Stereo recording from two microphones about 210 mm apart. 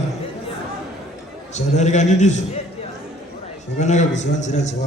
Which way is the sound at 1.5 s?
35° left (ahead or behind).